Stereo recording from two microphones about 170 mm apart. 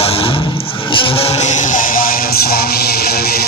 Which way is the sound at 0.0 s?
35° left (ahead or behind).